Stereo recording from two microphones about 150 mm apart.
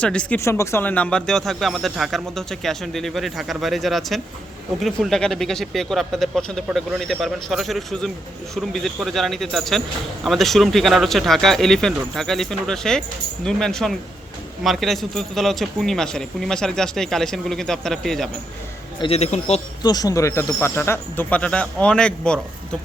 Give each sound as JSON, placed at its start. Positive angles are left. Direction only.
{"t": 0.0, "sound": "speech", "side_deg": 10}
{"t": 0.3, "sound": "speech", "side_deg": 20}
{"t": 19.0, "sound": "speech", "side_deg": 45}
{"t": 19.8, "sound": "speech", "side_deg": 25}